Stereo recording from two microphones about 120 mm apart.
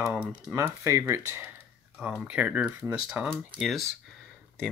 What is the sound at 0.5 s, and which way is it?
Speech, 25° right (ahead or behind).